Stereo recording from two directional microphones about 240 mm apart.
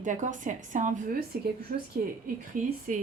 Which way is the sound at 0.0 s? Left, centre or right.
Right.